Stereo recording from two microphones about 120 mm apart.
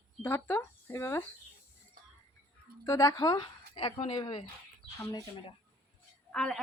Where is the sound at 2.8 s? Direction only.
30° left (ahead or behind).